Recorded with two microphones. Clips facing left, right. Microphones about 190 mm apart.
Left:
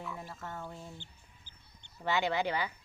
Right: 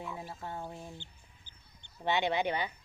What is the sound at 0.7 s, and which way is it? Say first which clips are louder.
Speech: right 1 dB; 20° right (ahead or behind).